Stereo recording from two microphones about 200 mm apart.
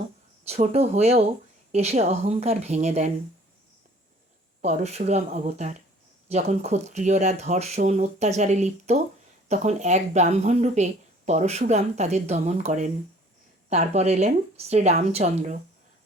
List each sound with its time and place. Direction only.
0.4 s speech: 30° right (ahead or behind)
4.6 s speech: 35° right (ahead or behind)